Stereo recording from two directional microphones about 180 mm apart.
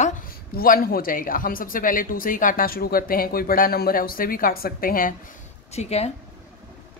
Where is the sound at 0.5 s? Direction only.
55° left (ahead or behind).